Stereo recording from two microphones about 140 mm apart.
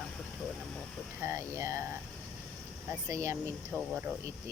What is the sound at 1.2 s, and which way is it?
Speech, 20° right (ahead or behind).